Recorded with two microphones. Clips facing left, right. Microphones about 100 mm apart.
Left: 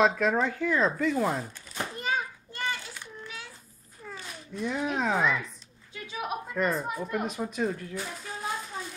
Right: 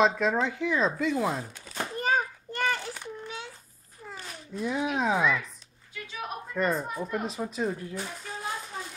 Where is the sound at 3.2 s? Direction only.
25° right (ahead or behind).